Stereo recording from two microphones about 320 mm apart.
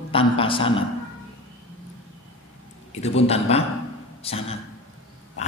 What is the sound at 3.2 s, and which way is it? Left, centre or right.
A man's voice, centre.